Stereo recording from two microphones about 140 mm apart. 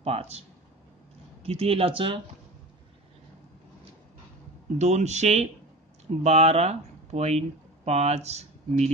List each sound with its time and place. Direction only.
0.0 s speech: 45° right (ahead or behind)
4.7 s speech: 55° right (ahead or behind)